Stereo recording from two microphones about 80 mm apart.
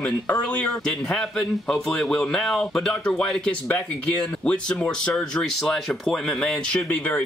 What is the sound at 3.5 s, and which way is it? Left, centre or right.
Speech, left.